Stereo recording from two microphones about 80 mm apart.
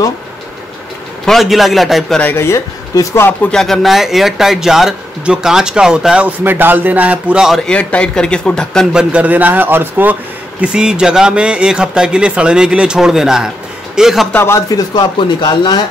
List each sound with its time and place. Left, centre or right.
1.2 s speech: centre
2.3 s speech: left
3.5 s speech: centre
6.2 s speech: right
7.6 s speech: centre
8.9 s speech: centre
10.6 s a man's voice: centre
14.3 s speech: left
14.7 s speech: left